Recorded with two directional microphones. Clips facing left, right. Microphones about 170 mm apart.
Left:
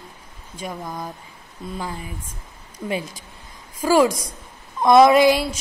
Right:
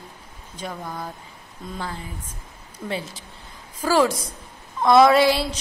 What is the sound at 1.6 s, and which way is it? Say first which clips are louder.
Speech: left 3 dB; 5° left (ahead or behind).